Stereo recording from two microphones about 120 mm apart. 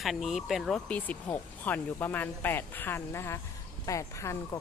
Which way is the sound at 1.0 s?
15° left (ahead or behind).